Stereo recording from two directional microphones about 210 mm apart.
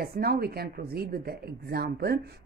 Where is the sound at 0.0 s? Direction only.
45° right (ahead or behind).